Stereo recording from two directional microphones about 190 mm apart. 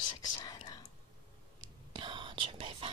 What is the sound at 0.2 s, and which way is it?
Whispering, 40° left (ahead or behind).